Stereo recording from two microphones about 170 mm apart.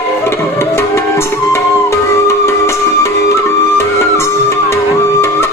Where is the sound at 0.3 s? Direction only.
15° left (ahead or behind).